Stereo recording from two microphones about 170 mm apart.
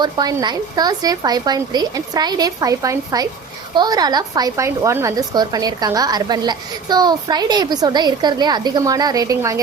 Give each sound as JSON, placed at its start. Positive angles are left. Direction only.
{"t": 0.0, "sound": "a woman's voice", "side_deg": -20}